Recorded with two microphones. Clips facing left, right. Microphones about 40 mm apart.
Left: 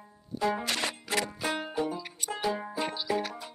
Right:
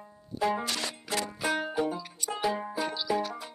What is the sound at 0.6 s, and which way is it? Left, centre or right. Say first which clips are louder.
Music: left 2 dB; left.